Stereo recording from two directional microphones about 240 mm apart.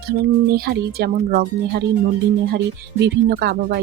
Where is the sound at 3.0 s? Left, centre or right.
Right.